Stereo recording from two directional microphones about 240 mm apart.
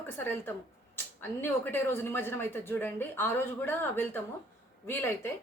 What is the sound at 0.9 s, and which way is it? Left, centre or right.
A woman's voice, centre.